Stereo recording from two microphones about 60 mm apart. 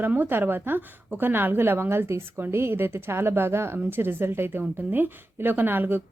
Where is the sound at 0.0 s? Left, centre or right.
Right.